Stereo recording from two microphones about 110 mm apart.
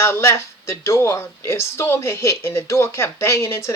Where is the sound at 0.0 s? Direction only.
25° left (ahead or behind).